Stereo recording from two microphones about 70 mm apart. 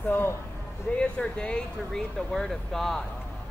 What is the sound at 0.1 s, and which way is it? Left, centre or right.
Speech, left.